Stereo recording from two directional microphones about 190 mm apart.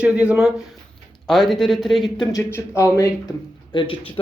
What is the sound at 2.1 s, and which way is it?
A man's voice, 20° left (ahead or behind).